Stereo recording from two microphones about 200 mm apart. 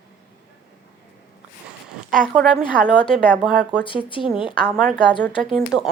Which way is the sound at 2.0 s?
Centre (ahead or behind).